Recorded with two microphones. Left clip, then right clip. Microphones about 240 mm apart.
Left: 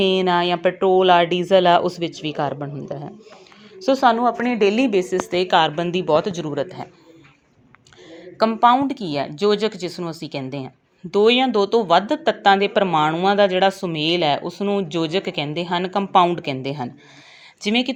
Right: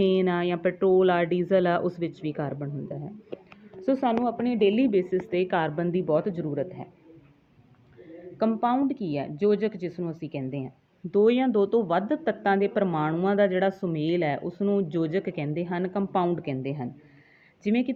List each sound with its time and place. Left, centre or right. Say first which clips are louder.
0.0 s speech: left 6 dB; centre
4.3 s a woman's voice: left 6 dB; left
4.7 s speech: left 5 dB; centre
8.4 s speech: left 10 dB; centre
17.7 s speech: left 7 dB; centre